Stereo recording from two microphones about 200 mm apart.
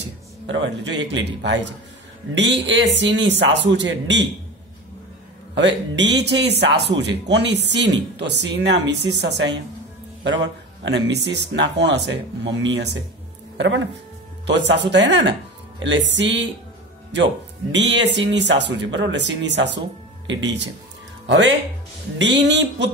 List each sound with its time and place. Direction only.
0.5 s speech: 60° right (ahead or behind)
5.5 s speech: 65° right (ahead or behind)